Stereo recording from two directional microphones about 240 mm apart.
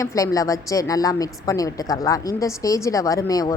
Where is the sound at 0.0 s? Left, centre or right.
Centre.